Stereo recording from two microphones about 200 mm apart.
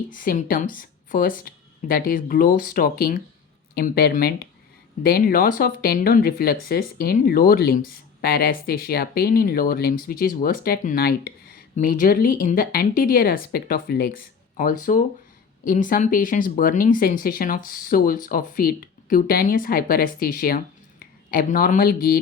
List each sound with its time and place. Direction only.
0.1 s speech: 45° left (ahead or behind)